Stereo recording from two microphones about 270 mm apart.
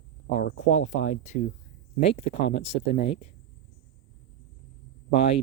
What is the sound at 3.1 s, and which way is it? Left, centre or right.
Speech, left.